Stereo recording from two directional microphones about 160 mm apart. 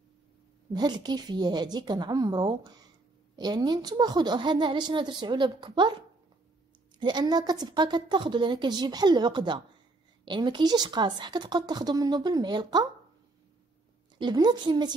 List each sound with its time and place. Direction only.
0.7 s a woman's voice: 25° right (ahead or behind)
7.0 s a woman's voice: 25° right (ahead or behind)
14.1 s a woman's voice: 25° right (ahead or behind)